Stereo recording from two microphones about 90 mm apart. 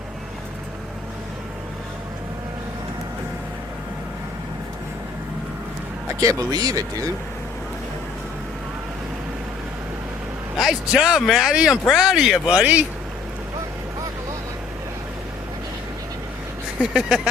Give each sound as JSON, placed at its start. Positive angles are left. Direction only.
{"t": 6.1, "sound": "speech", "side_deg": -40}
{"t": 10.6, "sound": "speech", "side_deg": -5}
{"t": 16.8, "sound": "speech", "side_deg": -10}